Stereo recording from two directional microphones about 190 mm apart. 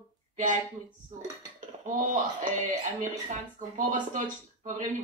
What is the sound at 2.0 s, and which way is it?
Speech, 40° right (ahead or behind).